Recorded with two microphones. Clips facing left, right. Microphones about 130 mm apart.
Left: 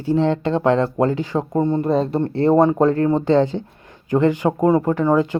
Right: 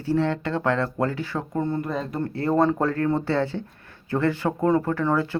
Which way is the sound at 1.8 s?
30° left (ahead or behind).